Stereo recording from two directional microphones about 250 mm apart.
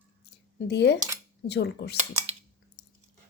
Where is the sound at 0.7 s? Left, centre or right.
Left.